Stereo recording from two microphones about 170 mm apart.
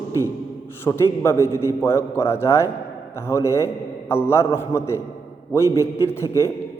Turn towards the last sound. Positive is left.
turn(degrees=15)  # may be behind; listen again after turning